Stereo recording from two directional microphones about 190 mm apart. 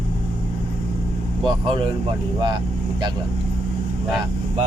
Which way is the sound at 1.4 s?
25° right (ahead or behind).